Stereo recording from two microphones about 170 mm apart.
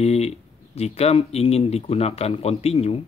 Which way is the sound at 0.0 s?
35° left (ahead or behind).